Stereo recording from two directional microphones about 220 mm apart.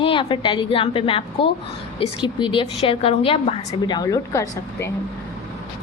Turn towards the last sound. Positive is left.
turn(degrees=15)  # may be behind; listen again after turning